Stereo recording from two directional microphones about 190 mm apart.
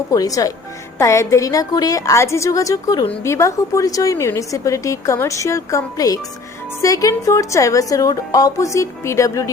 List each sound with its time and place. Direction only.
0.1 s a woman's voice: 20° left (ahead or behind)